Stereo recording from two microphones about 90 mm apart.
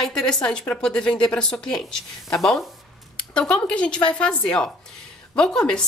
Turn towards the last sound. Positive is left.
turn(degrees=10)  # may be behind; listen again after turning